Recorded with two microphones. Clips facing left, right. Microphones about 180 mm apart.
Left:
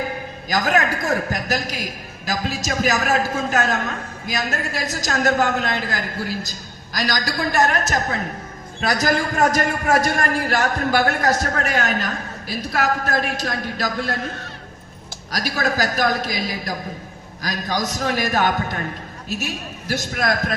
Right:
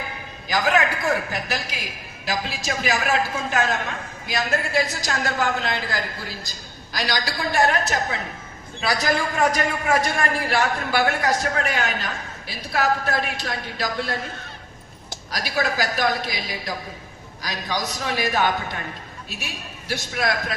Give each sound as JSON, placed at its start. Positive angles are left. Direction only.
{"t": 0.0, "sound": "a man's voice", "side_deg": 45}
{"t": 15.3, "sound": "a man's voice", "side_deg": 45}